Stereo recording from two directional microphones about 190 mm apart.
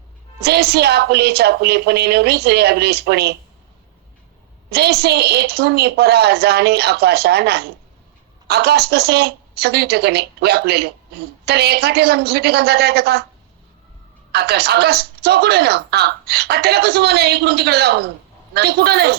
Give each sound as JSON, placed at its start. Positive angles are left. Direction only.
{"t": 0.4, "sound": "speech", "side_deg": -55}
{"t": 4.7, "sound": "speech", "side_deg": -55}
{"t": 14.3, "sound": "speech", "side_deg": -60}